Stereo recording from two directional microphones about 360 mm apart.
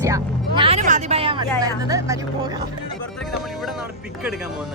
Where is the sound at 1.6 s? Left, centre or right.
Centre.